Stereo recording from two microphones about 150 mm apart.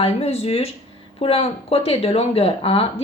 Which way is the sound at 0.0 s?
45° left (ahead or behind).